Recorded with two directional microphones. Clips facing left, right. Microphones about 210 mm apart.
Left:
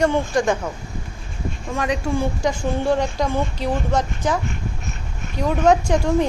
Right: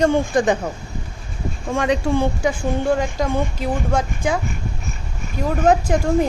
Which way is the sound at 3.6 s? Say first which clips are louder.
Even; 10° right (ahead or behind).